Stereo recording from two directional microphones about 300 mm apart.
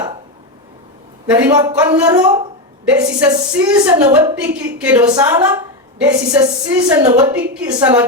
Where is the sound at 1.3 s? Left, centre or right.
Centre.